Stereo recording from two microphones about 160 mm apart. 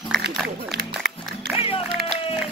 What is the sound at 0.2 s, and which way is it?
Speech, 90° right.